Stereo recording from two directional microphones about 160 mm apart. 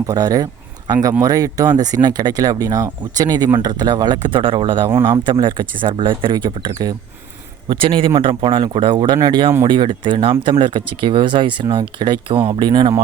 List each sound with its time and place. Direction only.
0.1 s speech: 20° right (ahead or behind)